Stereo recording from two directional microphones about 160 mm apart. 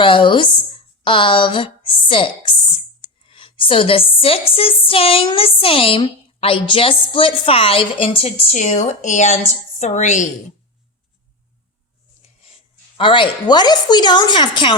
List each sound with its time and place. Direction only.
0.0 s a sound: 30° left (ahead or behind)
3.2 s a woman's voice: 35° left (ahead or behind); by 10.2 s 50° left (ahead or behind)
13.0 s a woman's voice: 30° left (ahead or behind)